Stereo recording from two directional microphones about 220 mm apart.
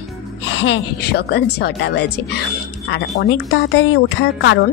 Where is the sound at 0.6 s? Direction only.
50° left (ahead or behind).